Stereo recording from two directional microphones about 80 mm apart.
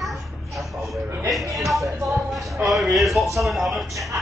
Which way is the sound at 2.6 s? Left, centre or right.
Centre.